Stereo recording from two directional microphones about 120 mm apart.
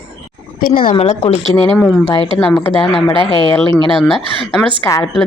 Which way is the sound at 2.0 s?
40° left (ahead or behind).